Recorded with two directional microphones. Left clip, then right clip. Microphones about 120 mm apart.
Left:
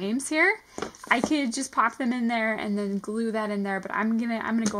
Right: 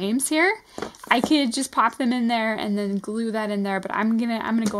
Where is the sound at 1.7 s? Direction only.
30° right (ahead or behind).